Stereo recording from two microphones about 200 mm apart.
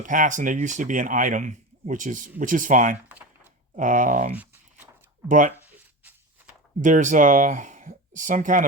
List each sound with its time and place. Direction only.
0.0 s speech: 40° right (ahead or behind)
3.1 s typing: 10° right (ahead or behind)
3.8 s speech: 40° right (ahead or behind)
5.6 s a sound: 10° right (ahead or behind)
6.8 s speech: 40° right (ahead or behind)